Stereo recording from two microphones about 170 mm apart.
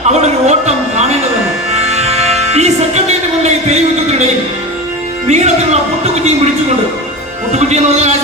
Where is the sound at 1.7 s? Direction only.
40° right (ahead or behind).